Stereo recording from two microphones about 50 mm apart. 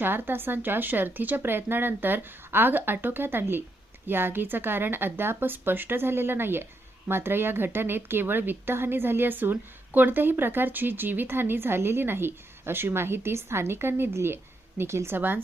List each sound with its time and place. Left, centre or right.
0.0 s a woman's voice: right